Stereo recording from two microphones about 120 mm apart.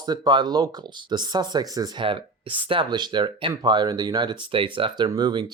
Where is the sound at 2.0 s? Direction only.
45° right (ahead or behind).